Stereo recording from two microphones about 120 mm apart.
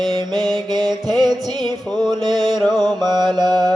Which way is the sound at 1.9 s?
35° right (ahead or behind).